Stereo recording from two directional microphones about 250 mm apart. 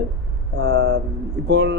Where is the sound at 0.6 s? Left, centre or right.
Right.